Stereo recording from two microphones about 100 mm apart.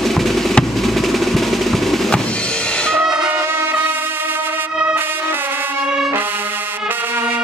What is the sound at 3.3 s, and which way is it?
Music, 25° right (ahead or behind).